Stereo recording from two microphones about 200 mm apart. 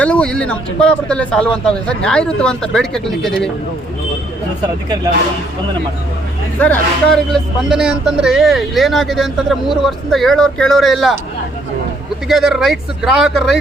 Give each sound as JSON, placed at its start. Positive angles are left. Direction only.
{"t": 0.0, "sound": "speech", "side_deg": 5}
{"t": 6.6, "sound": "speech", "side_deg": 5}
{"t": 12.3, "sound": "speech", "side_deg": 0}